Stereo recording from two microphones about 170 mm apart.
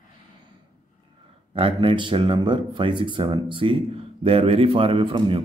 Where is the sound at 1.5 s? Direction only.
30° right (ahead or behind).